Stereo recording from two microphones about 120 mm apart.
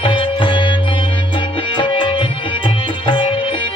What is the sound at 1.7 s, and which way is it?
Music, 40° left (ahead or behind).